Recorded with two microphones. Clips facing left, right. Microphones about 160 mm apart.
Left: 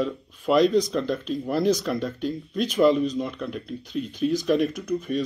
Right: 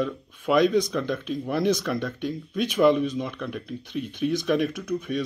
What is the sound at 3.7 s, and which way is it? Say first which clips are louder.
Speech: left 1 dB; 60° right (ahead or behind).